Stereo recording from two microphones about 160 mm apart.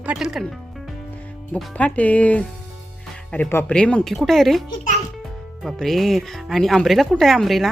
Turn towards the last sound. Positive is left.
turn(degrees=0)  # may be behind; listen again after turning